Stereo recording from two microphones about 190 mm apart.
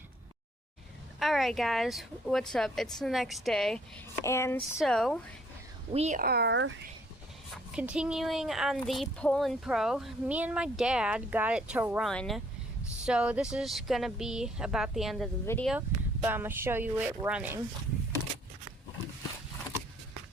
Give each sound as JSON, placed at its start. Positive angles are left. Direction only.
{"t": 1.2, "sound": "speech", "side_deg": 0}
{"t": 4.2, "sound": "speech", "side_deg": 15}
{"t": 4.8, "sound": "speech", "side_deg": 0}
{"t": 5.9, "sound": "speech", "side_deg": -35}
{"t": 6.2, "sound": "speech", "side_deg": -60}
{"t": 7.5, "sound": "speech", "side_deg": -5}
{"t": 12.0, "sound": "speech", "side_deg": 5}
{"t": 15.4, "sound": "speech", "side_deg": 10}
{"t": 16.2, "sound": "a woman's voice", "side_deg": -10}